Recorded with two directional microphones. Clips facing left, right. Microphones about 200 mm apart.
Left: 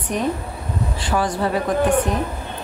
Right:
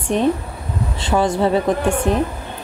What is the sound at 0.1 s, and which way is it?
Speech, 25° right (ahead or behind).